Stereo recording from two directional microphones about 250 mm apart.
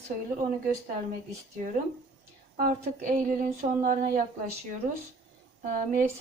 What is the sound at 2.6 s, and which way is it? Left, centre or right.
Speech, right.